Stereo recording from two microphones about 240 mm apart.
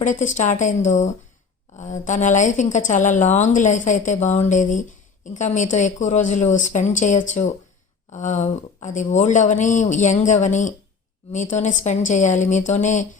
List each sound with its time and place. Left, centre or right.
0.0 s a woman's voice: left